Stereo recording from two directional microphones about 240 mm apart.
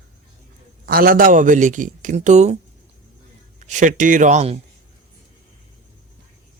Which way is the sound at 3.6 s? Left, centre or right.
Right.